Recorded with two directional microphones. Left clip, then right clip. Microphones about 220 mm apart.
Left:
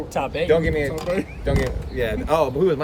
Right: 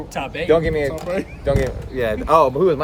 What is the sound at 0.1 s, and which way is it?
Speech, 15° left (ahead or behind).